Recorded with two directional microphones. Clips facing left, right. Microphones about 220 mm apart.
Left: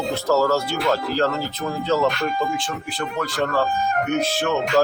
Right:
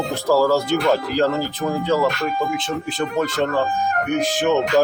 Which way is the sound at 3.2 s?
20° right (ahead or behind).